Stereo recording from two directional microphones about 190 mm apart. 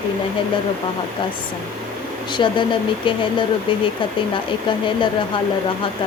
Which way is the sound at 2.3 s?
25° left (ahead or behind).